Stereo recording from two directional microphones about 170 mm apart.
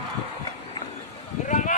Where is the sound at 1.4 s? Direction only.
50° left (ahead or behind).